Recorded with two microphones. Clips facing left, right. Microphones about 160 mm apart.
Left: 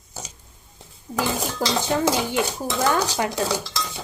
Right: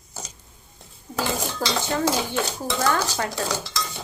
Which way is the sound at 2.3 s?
15° left (ahead or behind).